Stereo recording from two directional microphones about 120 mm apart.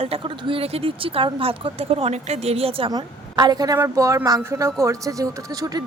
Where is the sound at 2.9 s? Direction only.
35° right (ahead or behind).